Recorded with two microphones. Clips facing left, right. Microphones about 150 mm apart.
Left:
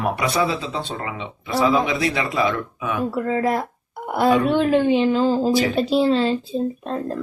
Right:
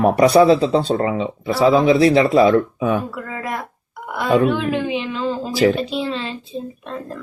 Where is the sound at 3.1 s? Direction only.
30° left (ahead or behind).